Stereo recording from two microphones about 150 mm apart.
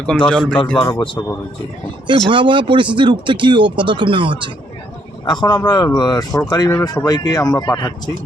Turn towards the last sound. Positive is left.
turn(degrees=25)  # may be behind; listen again after turning